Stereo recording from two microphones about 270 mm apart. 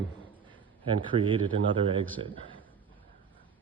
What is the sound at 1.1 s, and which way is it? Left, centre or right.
Speech, centre.